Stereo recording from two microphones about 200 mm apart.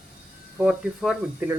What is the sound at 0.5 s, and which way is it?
Speech, 5° right (ahead or behind).